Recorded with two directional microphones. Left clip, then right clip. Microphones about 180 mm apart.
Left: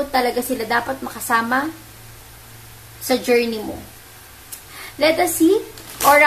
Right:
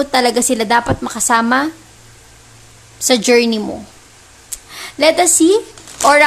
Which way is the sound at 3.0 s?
45° right (ahead or behind).